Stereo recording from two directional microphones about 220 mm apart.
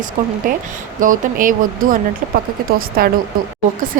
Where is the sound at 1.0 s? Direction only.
40° right (ahead or behind).